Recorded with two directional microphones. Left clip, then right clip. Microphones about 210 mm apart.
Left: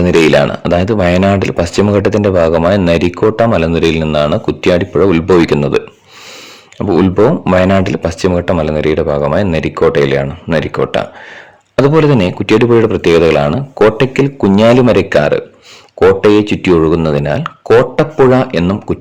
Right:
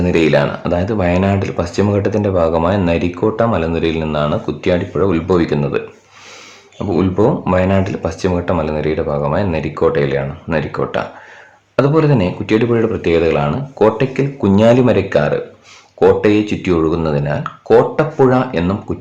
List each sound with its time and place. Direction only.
0.0 s a man's voice: 40° left (ahead or behind)